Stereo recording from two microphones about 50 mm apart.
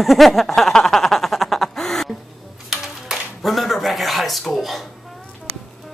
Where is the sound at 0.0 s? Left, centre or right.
Centre.